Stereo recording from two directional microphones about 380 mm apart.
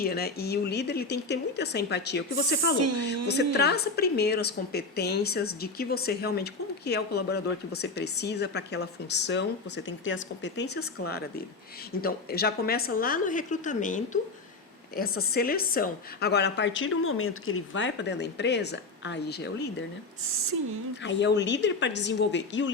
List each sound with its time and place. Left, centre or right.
0.0 s a woman's voice: left
2.7 s speech: right
3.2 s a woman's voice: left
21.0 s a woman's voice: left